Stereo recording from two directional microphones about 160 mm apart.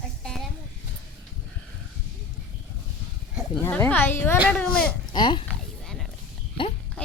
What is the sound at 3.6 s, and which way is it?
Speech, 15° left (ahead or behind).